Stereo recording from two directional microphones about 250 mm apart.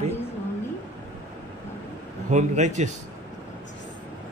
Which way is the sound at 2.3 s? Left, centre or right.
Right.